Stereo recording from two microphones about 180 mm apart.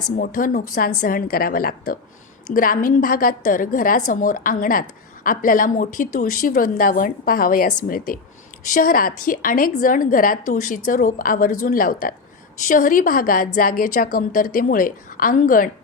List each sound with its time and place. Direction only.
0.2 s a woman's voice: 50° left (ahead or behind)